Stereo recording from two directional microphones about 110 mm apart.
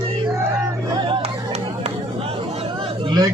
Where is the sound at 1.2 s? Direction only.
75° right (ahead or behind); by 3.1 s 55° right (ahead or behind).